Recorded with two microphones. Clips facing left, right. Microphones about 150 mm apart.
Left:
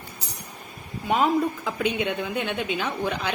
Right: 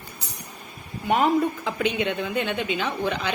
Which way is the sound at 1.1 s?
Centre (ahead or behind).